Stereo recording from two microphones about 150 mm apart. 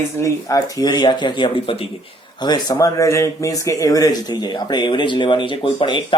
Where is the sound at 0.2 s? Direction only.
20° left (ahead or behind).